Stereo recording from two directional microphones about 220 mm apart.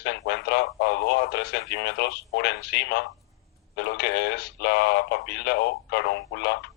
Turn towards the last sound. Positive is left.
turn(degrees=50)  # may be behind; listen again after turning